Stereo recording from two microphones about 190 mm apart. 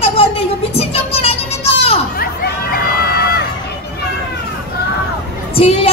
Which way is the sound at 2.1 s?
55° left (ahead or behind).